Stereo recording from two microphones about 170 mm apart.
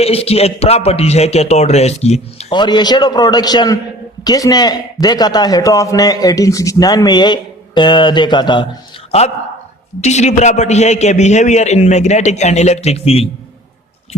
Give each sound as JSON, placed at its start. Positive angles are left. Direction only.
{"t": 0.0, "sound": "a man's voice", "side_deg": 35}
{"t": 2.5, "sound": "a man's voice", "side_deg": 25}
{"t": 10.0, "sound": "a man's voice", "side_deg": 40}